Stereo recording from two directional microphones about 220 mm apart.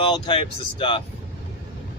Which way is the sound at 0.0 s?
25° left (ahead or behind).